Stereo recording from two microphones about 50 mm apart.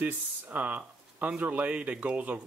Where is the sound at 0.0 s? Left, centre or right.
Right.